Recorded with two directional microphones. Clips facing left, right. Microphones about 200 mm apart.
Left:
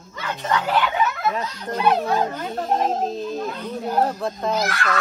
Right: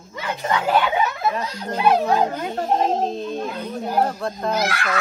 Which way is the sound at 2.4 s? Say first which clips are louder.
Right 1 dB; centre (ahead or behind).